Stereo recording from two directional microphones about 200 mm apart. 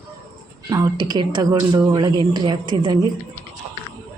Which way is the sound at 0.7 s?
20° right (ahead or behind).